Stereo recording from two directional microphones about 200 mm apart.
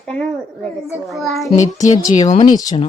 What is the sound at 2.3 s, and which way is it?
Child singing, 35° left (ahead or behind).